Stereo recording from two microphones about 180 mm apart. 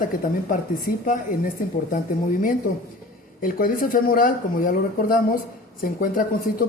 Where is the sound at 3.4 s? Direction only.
50° left (ahead or behind).